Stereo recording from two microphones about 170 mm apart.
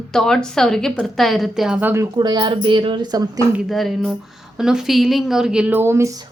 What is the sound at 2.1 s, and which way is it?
Speech, 25° right (ahead or behind).